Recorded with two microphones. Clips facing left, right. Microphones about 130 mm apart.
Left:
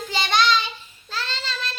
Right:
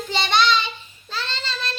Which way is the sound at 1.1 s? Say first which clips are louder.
Right 1 dB; 5° left (ahead or behind).